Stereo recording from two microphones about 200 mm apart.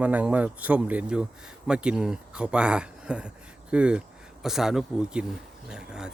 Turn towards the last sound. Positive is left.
turn(degrees=-5)  # may be behind; listen again after turning